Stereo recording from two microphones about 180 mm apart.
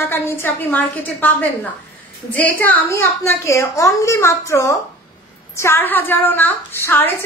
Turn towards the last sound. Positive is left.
turn(degrees=10)  # may be behind; listen again after turning